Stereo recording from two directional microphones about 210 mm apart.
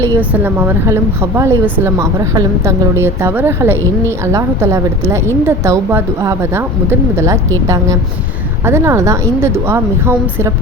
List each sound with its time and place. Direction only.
0.0 s a woman's voice: 10° right (ahead or behind)
8.6 s a woman's voice: 10° right (ahead or behind)